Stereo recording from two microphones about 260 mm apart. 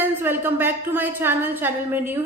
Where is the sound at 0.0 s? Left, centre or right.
Centre.